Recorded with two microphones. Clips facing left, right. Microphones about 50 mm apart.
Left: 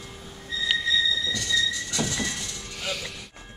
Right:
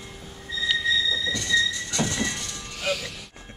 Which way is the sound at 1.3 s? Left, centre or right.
Right.